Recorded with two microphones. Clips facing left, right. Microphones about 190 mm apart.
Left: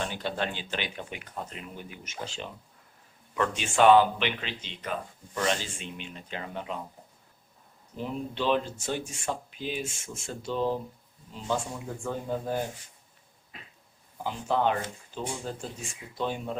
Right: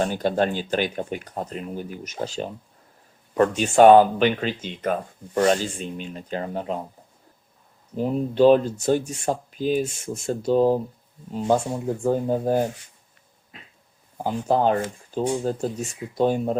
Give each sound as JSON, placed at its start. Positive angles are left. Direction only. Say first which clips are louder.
{"t": 0.0, "sound": "speech", "louder": "right 10 dB", "side_deg": -45}
{"t": 7.9, "sound": "speech", "louder": "right 12 dB", "side_deg": -40}
{"t": 14.2, "sound": "speech", "louder": "right 6 dB", "side_deg": -40}